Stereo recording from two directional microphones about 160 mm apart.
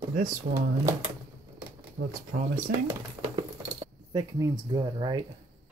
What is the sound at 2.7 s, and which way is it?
Speech, 55° right (ahead or behind).